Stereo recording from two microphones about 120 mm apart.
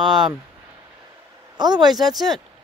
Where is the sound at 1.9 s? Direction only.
Centre (ahead or behind).